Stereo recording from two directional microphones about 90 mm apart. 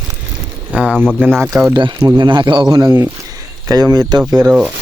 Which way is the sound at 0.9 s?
10° left (ahead or behind).